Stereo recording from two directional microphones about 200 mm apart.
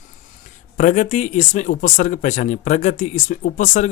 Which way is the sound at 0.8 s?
40° left (ahead or behind).